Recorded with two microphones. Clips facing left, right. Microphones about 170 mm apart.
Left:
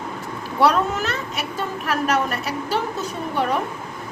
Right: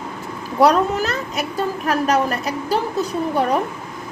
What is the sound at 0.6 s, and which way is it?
Speech, 40° right (ahead or behind).